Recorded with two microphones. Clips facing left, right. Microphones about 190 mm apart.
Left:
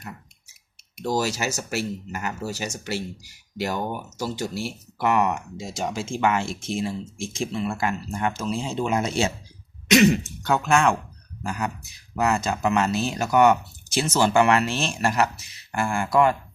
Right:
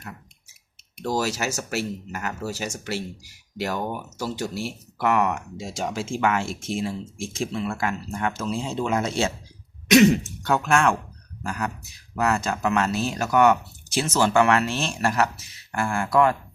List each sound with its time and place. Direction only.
1.0 s speech: centre (ahead or behind)